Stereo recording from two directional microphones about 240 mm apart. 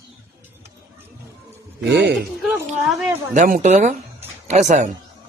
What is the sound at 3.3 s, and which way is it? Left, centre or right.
Speech, right.